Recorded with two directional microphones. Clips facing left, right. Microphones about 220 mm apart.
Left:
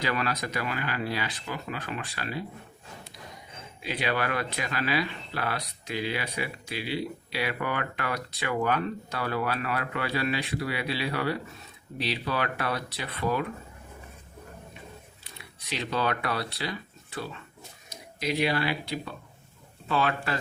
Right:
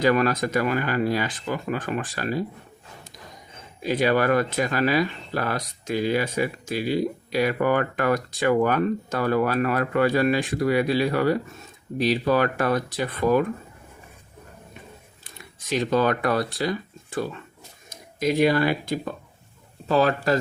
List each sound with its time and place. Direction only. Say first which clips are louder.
0.0 s speech: right 9 dB; 45° right (ahead or behind)
3.8 s speech: right 9 dB; 45° right (ahead or behind)
15.2 s speech: right 3 dB; 45° right (ahead or behind)